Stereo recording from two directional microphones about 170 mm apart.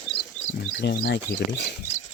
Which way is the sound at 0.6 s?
90° left.